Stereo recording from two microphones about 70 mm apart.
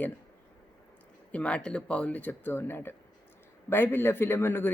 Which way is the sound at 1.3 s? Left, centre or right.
Centre.